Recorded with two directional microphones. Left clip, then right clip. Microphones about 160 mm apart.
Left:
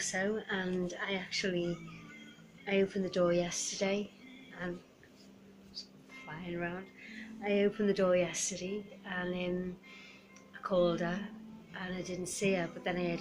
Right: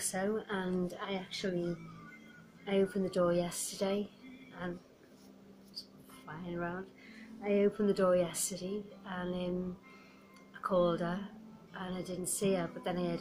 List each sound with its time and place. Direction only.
0.0 s a woman's voice: 5° left (ahead or behind)
6.4 s a woman's voice: 5° left (ahead or behind)
10.6 s a woman's voice: centre (ahead or behind)